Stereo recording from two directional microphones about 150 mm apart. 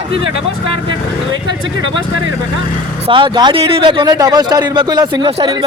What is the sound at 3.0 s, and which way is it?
A man's voice, 35° right (ahead or behind).